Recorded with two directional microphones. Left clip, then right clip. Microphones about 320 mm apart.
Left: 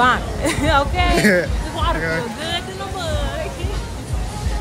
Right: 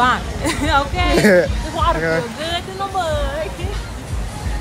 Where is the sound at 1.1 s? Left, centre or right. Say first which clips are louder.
Right 5 dB; centre.